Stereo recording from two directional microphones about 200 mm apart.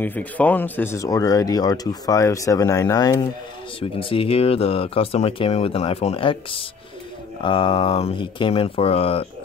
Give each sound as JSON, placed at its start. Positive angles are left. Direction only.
{"t": 0.0, "sound": "speech", "side_deg": 10}